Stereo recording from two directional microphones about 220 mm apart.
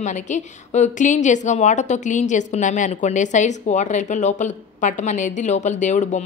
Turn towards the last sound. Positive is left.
turn(degrees=35)  # may be behind; listen again after turning